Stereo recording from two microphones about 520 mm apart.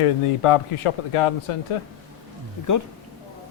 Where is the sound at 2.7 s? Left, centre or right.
Left.